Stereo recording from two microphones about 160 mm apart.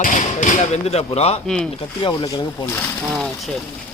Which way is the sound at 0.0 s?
50° left (ahead or behind).